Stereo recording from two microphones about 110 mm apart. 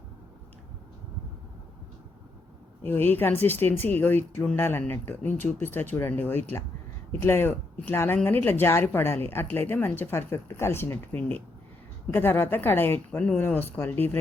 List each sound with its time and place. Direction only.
2.8 s speech: 20° left (ahead or behind)